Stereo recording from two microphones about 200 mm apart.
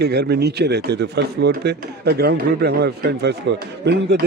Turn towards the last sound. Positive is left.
turn(degrees=-60)  # may be behind; listen again after turning